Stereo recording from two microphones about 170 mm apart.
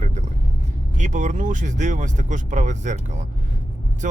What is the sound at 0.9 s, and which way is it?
Speech, 45° right (ahead or behind).